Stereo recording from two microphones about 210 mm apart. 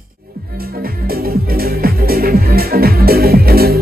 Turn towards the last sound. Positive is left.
turn(degrees=-45)  # may be behind; listen again after turning